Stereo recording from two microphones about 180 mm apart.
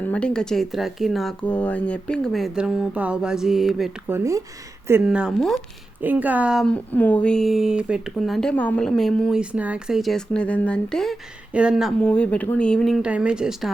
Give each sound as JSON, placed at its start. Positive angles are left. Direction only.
{"t": 0.0, "sound": "speech", "side_deg": 5}
{"t": 4.1, "sound": "speech", "side_deg": -15}
{"t": 5.0, "sound": "speech", "side_deg": -5}
{"t": 6.9, "sound": "speech", "side_deg": 10}